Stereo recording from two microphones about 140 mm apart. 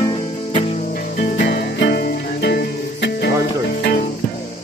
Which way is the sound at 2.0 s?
90° left.